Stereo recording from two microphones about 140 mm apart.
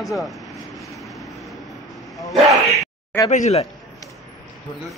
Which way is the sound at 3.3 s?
55° left (ahead or behind).